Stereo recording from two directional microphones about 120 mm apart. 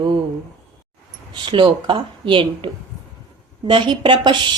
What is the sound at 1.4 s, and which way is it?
Speech, 45° right (ahead or behind).